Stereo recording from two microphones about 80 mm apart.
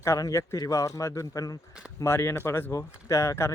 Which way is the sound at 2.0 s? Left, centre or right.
Left.